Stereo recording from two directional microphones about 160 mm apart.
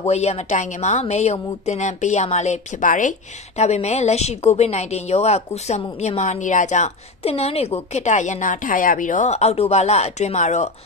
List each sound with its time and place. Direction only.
0.0 s a woman's voice: 45° left (ahead or behind)